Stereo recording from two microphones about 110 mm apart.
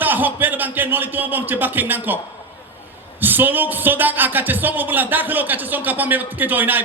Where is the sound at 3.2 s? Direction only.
15° right (ahead or behind).